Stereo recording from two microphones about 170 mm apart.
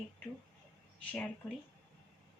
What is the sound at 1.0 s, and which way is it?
Speech, 10° left (ahead or behind).